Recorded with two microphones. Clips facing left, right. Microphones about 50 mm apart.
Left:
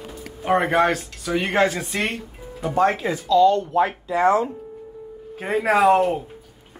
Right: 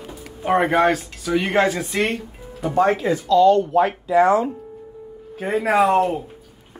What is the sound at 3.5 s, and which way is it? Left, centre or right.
Speech, right.